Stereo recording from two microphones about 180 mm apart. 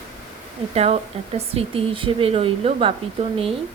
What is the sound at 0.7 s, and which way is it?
Speech, 35° right (ahead or behind).